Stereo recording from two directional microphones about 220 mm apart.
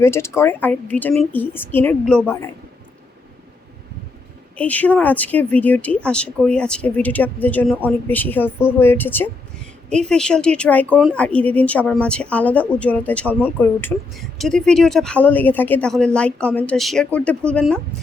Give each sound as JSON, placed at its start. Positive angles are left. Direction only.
{"t": 0.0, "sound": "speech", "side_deg": 10}
{"t": 4.5, "sound": "speech", "side_deg": 5}